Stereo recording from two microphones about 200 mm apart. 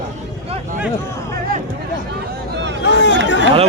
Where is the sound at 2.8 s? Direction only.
60° left (ahead or behind).